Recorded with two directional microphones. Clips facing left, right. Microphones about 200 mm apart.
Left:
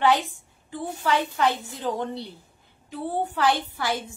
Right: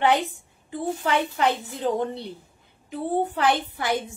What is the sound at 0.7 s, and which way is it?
A woman's voice, 20° right (ahead or behind).